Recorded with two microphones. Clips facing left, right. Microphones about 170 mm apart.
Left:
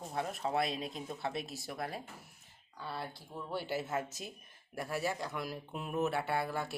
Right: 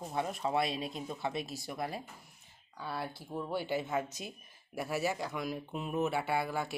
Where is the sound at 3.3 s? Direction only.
15° right (ahead or behind).